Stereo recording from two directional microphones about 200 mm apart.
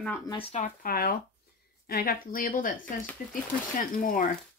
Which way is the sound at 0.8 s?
45° left (ahead or behind).